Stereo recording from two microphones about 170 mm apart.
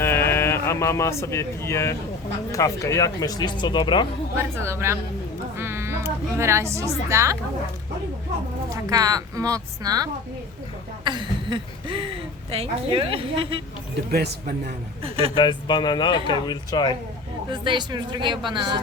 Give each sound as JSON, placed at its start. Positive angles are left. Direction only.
{"t": 0.0, "sound": "a man's voice", "side_deg": 15}
{"t": 4.4, "sound": "a woman's voice", "side_deg": -15}
{"t": 8.7, "sound": "a woman's voice", "side_deg": -20}
{"t": 14.1, "sound": "speech", "side_deg": -65}
{"t": 15.0, "sound": "a woman's voice", "side_deg": -35}
{"t": 15.4, "sound": "speech", "side_deg": 25}
{"t": 17.5, "sound": "a woman's voice", "side_deg": -30}